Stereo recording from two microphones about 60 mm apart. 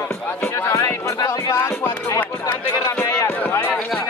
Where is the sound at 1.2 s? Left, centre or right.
Left.